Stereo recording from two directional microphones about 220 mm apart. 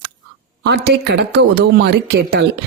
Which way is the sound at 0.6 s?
50° right (ahead or behind).